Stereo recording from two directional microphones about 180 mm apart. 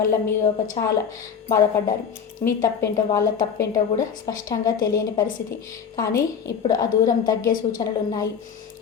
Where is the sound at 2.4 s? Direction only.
15° left (ahead or behind).